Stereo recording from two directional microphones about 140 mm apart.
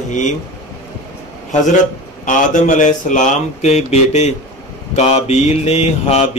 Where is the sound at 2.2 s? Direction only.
65° left (ahead or behind).